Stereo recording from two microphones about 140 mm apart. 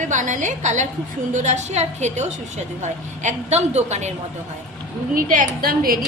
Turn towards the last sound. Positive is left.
turn(degrees=-90)